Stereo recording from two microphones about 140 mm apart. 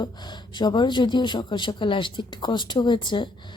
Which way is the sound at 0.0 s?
30° left (ahead or behind).